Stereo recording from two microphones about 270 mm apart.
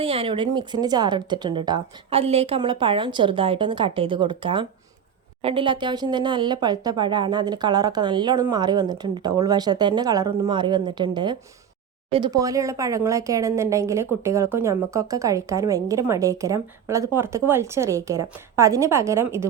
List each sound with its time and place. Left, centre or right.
0.0 s speech: right